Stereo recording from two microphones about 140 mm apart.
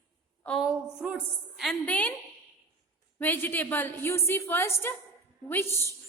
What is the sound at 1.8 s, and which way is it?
Speech, 10° left (ahead or behind).